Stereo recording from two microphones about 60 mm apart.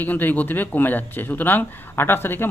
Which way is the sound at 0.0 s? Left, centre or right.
Left.